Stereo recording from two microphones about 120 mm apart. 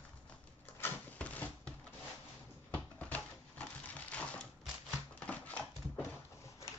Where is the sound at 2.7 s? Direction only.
10° left (ahead or behind).